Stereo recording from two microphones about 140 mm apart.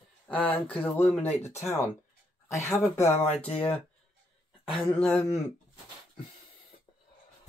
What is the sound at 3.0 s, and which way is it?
Speech, 50° left (ahead or behind).